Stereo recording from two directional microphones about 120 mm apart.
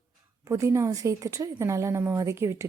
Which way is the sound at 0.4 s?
25° right (ahead or behind).